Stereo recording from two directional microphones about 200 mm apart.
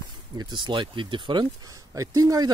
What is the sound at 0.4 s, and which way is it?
Speech, 20° right (ahead or behind).